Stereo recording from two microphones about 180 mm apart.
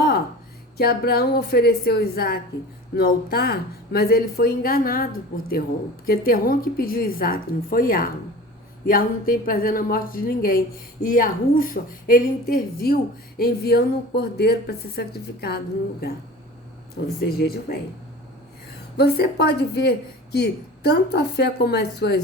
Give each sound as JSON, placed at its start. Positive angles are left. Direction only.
{"t": 0.8, "sound": "a woman's voice", "side_deg": 60}
{"t": 6.1, "sound": "a woman's voice", "side_deg": 55}
{"t": 17.2, "sound": "a woman's voice", "side_deg": 60}
{"t": 18.9, "sound": "a woman's voice", "side_deg": 60}